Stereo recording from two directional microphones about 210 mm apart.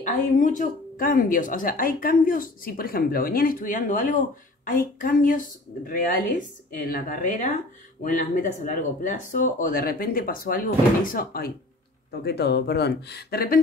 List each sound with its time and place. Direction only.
0.0 s speech: 40° left (ahead or behind)